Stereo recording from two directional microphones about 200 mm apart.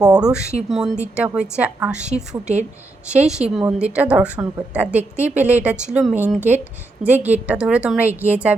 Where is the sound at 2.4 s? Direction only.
35° right (ahead or behind).